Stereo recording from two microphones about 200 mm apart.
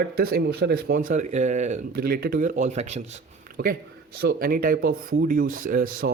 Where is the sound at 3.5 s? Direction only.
50° right (ahead or behind).